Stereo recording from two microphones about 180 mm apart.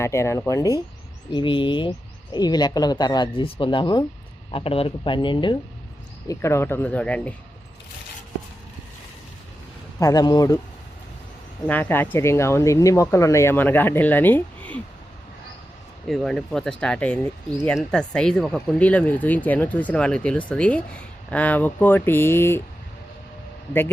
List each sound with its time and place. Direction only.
0.0 s speech: 15° left (ahead or behind)
6.2 s speech: 15° left (ahead or behind)
10.0 s speech: 20° left (ahead or behind)
11.7 s speech: 10° left (ahead or behind)
16.0 s speech: centre (ahead or behind)